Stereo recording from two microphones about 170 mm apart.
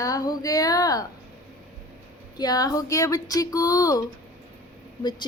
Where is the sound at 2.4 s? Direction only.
20° left (ahead or behind).